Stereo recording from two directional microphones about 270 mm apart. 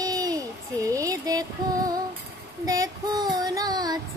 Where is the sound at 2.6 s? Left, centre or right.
Centre.